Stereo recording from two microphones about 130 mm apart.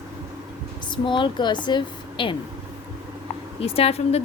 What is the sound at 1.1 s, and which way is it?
A woman's voice, 35° left (ahead or behind).